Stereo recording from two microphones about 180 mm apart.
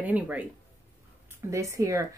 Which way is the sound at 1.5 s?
20° right (ahead or behind).